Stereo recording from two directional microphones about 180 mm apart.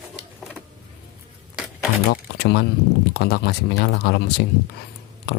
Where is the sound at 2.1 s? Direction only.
60° left (ahead or behind).